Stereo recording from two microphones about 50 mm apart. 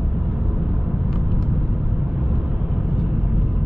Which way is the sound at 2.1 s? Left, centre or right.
Centre.